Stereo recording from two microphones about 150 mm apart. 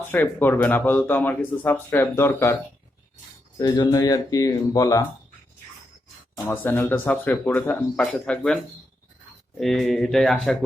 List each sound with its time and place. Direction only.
0.0 s speech: 10° left (ahead or behind)
3.6 s speech: 25° left (ahead or behind)
6.3 s speech: 15° left (ahead or behind)
9.6 s speech: centre (ahead or behind)